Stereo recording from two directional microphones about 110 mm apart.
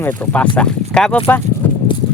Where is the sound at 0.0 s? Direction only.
15° left (ahead or behind).